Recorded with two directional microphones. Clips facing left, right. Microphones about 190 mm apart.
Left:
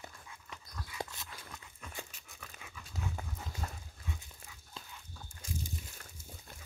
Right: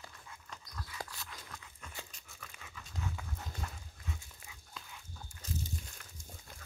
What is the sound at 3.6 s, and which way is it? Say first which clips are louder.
Dog: left 5 dB; 30° left (ahead or behind).